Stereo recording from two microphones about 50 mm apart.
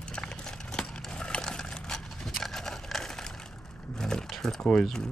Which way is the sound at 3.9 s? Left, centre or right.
Centre.